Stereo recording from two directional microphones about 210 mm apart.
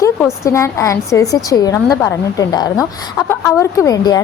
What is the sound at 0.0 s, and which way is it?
A woman's voice, 15° left (ahead or behind).